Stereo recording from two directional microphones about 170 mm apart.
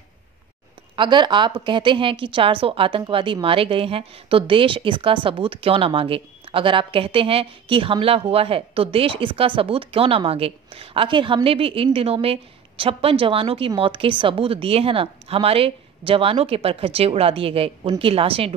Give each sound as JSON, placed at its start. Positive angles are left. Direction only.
{"t": 0.9, "sound": "a woman's voice", "side_deg": -25}